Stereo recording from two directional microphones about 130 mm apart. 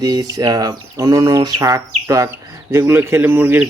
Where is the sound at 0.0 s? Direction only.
30° right (ahead or behind).